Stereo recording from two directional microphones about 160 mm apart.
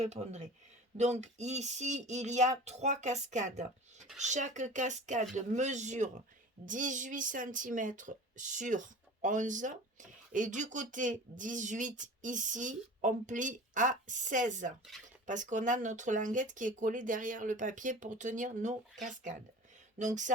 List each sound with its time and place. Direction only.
0.0 s speech: 45° right (ahead or behind)